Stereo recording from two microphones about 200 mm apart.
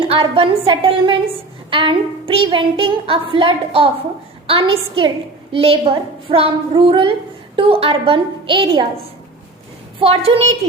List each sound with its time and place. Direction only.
0.1 s a woman's voice: 25° right (ahead or behind)
10.0 s a woman's voice: 30° right (ahead or behind)